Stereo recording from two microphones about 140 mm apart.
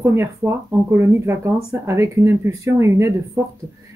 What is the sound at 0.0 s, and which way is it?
Speech, 20° right (ahead or behind).